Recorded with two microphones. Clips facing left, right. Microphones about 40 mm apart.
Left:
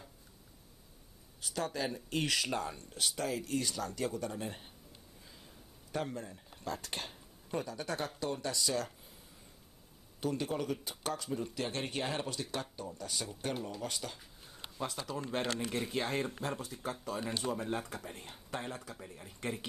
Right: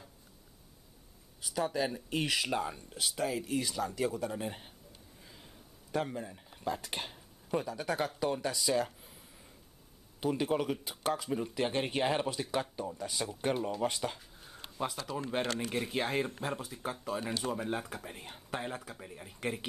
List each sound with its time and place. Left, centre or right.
1.4 s speech: centre
5.9 s speech: centre
10.2 s speech: centre